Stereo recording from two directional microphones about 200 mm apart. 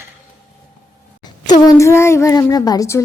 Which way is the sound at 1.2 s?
20° left (ahead or behind).